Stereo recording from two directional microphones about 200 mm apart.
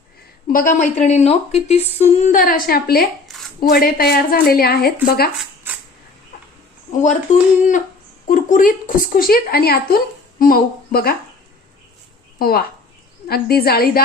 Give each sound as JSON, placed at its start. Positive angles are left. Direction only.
{"t": 0.4, "sound": "a woman's voice", "side_deg": 45}
{"t": 6.9, "sound": "a woman's voice", "side_deg": 40}
{"t": 12.4, "sound": "a woman's voice", "side_deg": 50}